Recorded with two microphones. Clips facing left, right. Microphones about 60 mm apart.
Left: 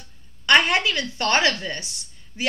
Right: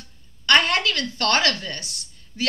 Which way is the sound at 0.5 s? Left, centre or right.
Centre.